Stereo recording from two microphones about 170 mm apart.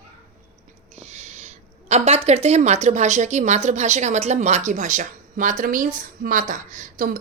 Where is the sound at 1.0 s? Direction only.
40° right (ahead or behind).